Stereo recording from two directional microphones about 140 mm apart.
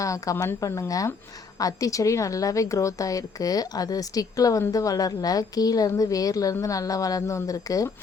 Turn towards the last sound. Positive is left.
turn(degrees=25)  # may be behind; listen again after turning